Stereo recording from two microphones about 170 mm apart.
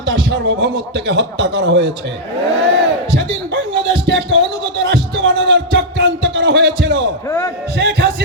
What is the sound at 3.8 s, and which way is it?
Music, 90° right.